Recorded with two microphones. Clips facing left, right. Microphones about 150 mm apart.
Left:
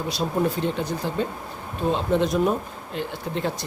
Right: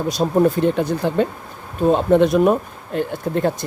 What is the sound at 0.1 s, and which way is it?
Speech, 45° right (ahead or behind).